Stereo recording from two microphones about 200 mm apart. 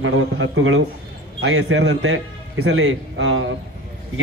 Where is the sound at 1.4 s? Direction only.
60° right (ahead or behind).